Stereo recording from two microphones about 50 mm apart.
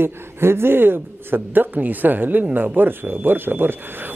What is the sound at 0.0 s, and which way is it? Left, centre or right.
A woman's voice, right.